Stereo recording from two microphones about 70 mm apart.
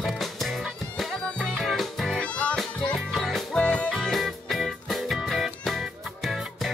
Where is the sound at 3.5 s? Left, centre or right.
Centre.